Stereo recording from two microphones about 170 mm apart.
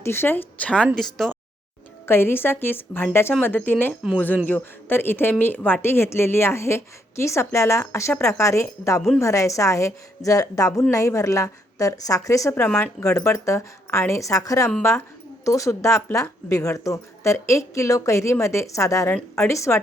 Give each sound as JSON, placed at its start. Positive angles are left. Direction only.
{"t": 0.0, "sound": "speech", "side_deg": 15}
{"t": 2.0, "sound": "a woman's voice", "side_deg": 15}